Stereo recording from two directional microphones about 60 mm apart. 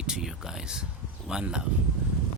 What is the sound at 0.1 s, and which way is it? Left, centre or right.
Speech, centre.